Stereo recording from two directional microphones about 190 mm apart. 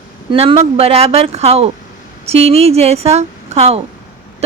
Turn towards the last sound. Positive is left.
turn(degrees=-35)  # may be behind; listen again after turning